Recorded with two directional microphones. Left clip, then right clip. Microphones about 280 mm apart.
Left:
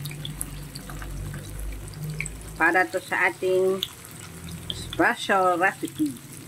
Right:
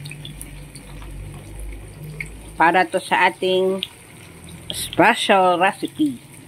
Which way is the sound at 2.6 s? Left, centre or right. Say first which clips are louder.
Right 5 dB; centre.